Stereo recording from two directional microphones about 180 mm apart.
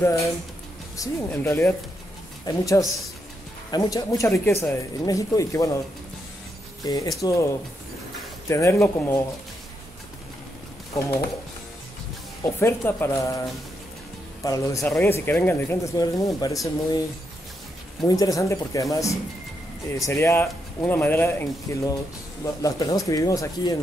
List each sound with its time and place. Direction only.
0.9 s speech: 15° left (ahead or behind)
6.8 s speech: 20° left (ahead or behind)
8.5 s speech: 15° left (ahead or behind)
11.0 s speech: 15° left (ahead or behind)
12.4 s speech: 15° left (ahead or behind)
14.4 s speech: 20° left (ahead or behind)
18.0 s speech: 20° left (ahead or behind)